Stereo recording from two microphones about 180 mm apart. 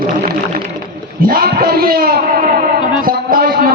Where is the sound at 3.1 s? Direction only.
55° right (ahead or behind).